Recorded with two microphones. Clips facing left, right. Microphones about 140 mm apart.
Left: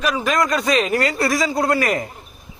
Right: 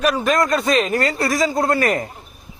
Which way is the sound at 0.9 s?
40° right (ahead or behind).